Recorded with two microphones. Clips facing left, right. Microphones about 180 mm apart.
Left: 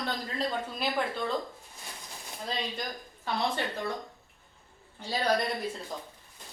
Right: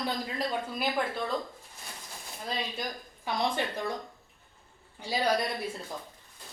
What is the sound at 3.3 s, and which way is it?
Speech, 10° right (ahead or behind).